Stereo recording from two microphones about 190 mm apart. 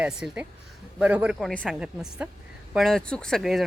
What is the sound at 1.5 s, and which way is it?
Speech, 5° left (ahead or behind).